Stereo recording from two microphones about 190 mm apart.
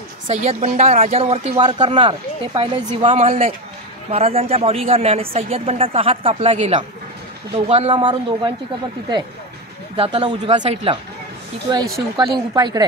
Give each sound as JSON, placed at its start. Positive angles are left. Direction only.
{"t": 0.3, "sound": "speech", "side_deg": -35}
{"t": 9.9, "sound": "speech", "side_deg": -30}
{"t": 12.2, "sound": "speech", "side_deg": -20}